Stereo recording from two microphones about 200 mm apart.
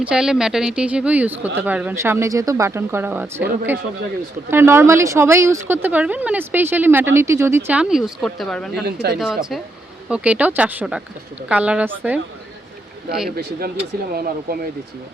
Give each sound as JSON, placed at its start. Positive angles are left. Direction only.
{"t": 0.0, "sound": "speech", "side_deg": -5}
{"t": 8.8, "sound": "speech", "side_deg": -55}
{"t": 9.1, "sound": "speech", "side_deg": 0}
{"t": 14.1, "sound": "speech", "side_deg": -50}